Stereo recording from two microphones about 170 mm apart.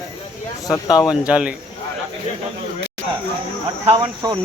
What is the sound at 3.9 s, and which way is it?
Speech, 25° right (ahead or behind).